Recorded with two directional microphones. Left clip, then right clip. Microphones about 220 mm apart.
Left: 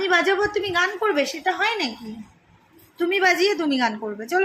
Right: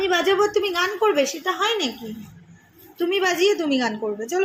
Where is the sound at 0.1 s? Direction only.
10° left (ahead or behind).